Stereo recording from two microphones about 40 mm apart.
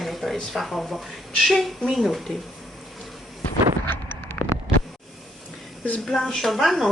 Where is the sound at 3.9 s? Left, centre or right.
Left.